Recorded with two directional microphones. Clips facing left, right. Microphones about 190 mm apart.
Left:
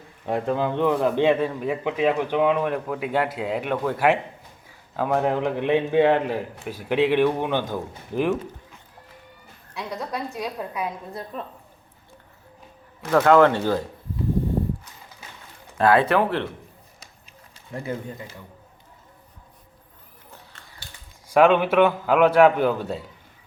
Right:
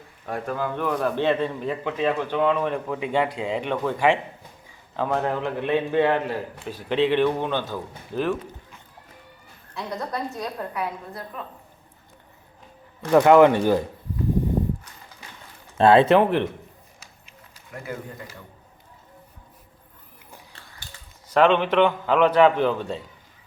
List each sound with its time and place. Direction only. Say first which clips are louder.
0.3 s a man's voice: left 4 dB; 25° left (ahead or behind)
9.7 s a woman's voice: right 1 dB; 5° left (ahead or behind)
13.1 s speech: right 2 dB; 15° right (ahead or behind)
15.8 s speech: right 3 dB; 25° right (ahead or behind)
17.7 s speech: left 4 dB; 30° left (ahead or behind)
21.2 s a man's voice: left 2 dB; 10° left (ahead or behind)